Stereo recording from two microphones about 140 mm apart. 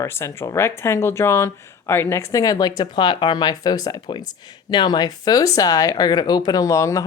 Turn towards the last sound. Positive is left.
turn(degrees=20)  # may be behind; listen again after turning